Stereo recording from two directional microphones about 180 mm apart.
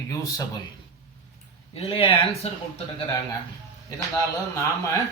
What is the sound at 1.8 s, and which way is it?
Speech, 30° left (ahead or behind).